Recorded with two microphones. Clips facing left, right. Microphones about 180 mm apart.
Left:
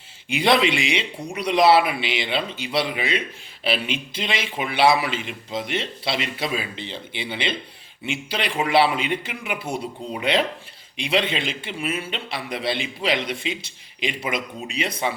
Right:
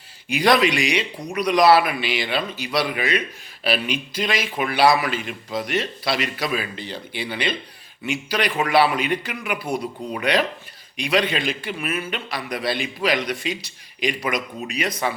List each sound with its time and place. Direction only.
0.3 s a man's voice: 25° left (ahead or behind)